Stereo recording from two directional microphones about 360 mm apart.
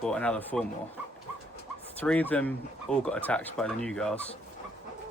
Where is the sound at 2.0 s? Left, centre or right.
Centre.